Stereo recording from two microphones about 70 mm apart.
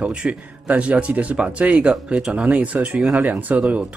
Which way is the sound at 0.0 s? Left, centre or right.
Centre.